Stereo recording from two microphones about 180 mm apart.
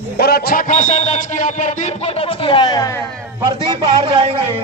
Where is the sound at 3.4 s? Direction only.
25° right (ahead or behind).